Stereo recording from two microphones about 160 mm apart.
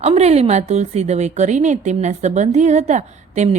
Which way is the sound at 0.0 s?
40° right (ahead or behind).